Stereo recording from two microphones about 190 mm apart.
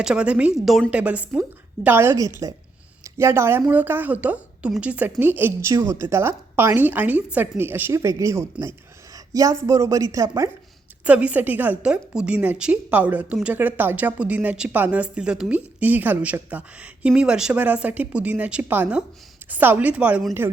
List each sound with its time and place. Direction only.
0.0 s a woman's voice: 5° right (ahead or behind)